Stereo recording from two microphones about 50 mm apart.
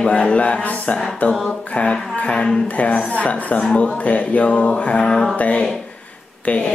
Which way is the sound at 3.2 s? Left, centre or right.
Left.